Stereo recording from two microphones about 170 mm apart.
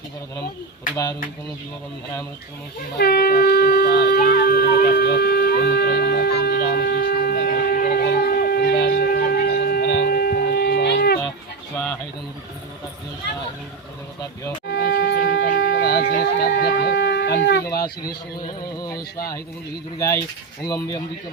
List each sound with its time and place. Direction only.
3.0 s shofar: 65° left (ahead or behind)
14.7 s shofar: 70° left (ahead or behind); by 17.6 s 90° left
20.7 s speech: 20° left (ahead or behind)